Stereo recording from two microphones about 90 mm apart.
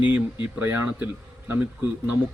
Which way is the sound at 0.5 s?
25° right (ahead or behind).